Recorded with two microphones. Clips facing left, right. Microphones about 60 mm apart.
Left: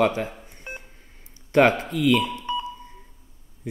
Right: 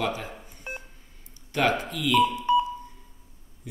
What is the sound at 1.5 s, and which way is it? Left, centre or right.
Speech, left.